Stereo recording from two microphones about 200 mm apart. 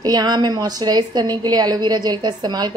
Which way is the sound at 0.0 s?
20° right (ahead or behind).